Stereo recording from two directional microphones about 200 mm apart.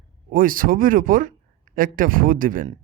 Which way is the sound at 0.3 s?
45° right (ahead or behind).